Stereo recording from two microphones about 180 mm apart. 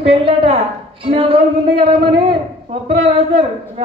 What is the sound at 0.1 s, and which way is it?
A woman's voice, 30° right (ahead or behind).